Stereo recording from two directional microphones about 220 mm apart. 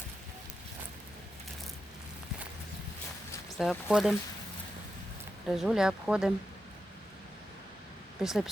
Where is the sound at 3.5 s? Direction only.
Centre (ahead or behind).